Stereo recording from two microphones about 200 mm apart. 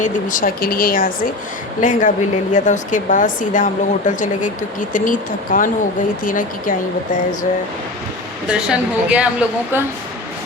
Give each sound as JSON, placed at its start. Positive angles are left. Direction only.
{"t": 0.0, "sound": "speech", "side_deg": 40}
{"t": 8.4, "sound": "speech", "side_deg": -5}